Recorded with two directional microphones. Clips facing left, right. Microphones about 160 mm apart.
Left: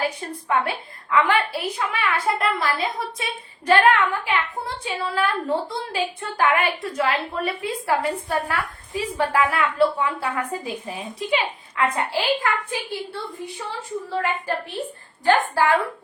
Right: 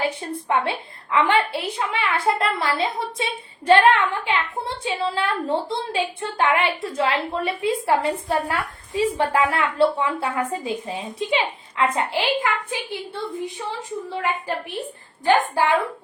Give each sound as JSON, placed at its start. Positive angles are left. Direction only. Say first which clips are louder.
{"t": 0.0, "sound": "a woman's voice", "louder": "right 1 dB", "side_deg": -25}
{"t": 14.2, "sound": "a woman's voice", "louder": "left 1 dB", "side_deg": -20}